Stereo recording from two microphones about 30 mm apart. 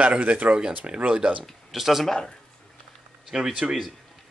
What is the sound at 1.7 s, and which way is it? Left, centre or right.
Speech, centre.